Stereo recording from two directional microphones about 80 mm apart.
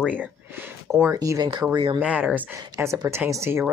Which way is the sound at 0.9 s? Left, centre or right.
Right.